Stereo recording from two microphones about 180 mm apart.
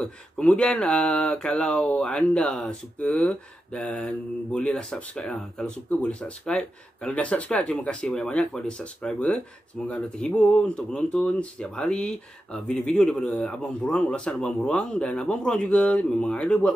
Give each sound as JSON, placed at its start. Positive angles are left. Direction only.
{"t": 0.0, "sound": "speech", "side_deg": 5}